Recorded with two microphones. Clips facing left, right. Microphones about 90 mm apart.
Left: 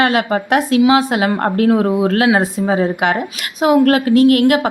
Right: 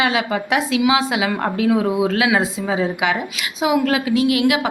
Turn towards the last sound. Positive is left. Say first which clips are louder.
# left 6 dB
turn(degrees=50)  # may be behind; listen again after turning